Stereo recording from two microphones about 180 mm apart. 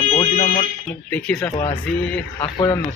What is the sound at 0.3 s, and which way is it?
Fire alarm, 45° left (ahead or behind).